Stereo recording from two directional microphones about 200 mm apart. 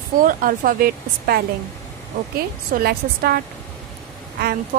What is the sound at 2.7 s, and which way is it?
Speech, 50° right (ahead or behind).